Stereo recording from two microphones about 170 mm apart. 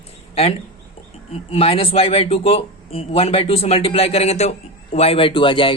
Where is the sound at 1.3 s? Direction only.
35° left (ahead or behind).